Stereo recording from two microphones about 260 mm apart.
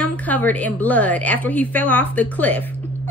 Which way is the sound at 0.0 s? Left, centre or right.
Centre.